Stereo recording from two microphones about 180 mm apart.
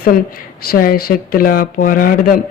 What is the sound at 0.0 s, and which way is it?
A woman's voice, 55° left (ahead or behind).